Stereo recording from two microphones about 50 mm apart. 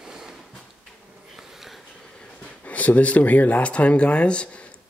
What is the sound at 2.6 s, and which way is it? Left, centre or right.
Speech, left.